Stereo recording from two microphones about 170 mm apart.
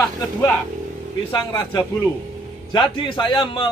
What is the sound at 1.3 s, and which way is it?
A man's voice, 25° left (ahead or behind).